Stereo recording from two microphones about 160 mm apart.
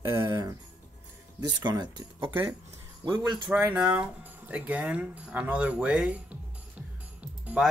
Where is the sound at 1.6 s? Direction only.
25° right (ahead or behind).